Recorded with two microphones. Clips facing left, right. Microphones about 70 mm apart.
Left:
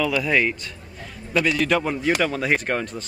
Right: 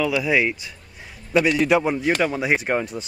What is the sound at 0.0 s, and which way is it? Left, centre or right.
Speech, centre.